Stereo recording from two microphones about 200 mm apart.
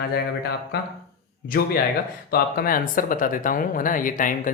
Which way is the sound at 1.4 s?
45° left (ahead or behind).